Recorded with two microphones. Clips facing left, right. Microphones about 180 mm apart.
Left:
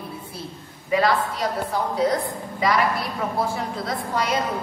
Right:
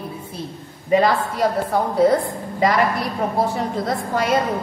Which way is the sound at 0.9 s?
45° right (ahead or behind).